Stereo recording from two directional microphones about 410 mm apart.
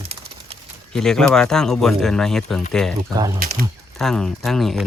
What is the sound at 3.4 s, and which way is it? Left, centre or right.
Speech, right.